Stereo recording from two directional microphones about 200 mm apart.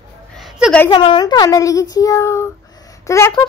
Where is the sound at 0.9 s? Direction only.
25° left (ahead or behind).